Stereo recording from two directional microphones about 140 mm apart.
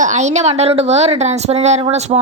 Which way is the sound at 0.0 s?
55° right (ahead or behind).